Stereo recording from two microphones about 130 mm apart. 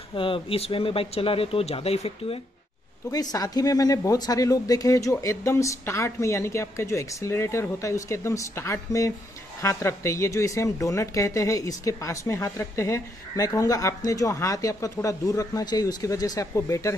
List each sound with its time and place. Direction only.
0.1 s speech: 40° left (ahead or behind)
3.1 s a woman's voice: 30° left (ahead or behind)